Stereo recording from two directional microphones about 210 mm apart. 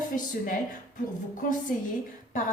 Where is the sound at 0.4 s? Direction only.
40° left (ahead or behind).